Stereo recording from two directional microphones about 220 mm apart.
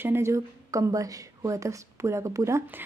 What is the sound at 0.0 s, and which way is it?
A woman's voice, 10° right (ahead or behind).